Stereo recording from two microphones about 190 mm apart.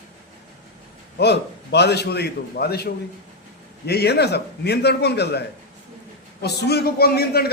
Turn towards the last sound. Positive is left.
turn(degrees=55)  # may be behind; listen again after turning